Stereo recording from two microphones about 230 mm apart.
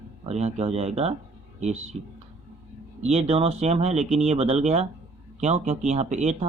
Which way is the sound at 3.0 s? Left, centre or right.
Right.